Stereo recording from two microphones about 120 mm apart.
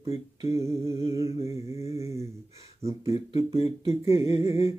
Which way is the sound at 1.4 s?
60° left (ahead or behind).